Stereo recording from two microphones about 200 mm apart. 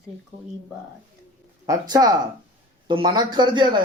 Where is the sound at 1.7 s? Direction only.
20° right (ahead or behind).